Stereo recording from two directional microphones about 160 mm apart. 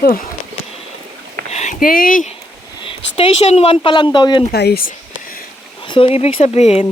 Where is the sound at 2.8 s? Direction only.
35° left (ahead or behind).